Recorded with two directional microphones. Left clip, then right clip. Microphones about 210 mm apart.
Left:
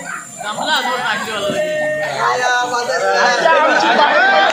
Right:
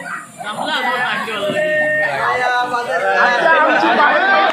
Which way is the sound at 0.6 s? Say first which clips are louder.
Left 1 dB; 30° left (ahead or behind).